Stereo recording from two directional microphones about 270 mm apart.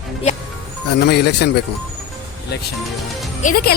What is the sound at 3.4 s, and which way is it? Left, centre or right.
Speech, left.